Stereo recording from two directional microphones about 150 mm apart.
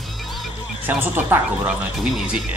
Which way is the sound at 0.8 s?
15° right (ahead or behind).